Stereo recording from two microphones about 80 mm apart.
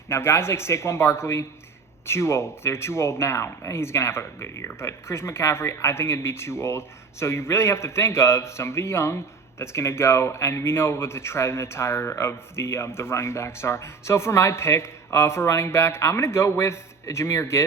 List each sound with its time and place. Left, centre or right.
0.1 s speech: left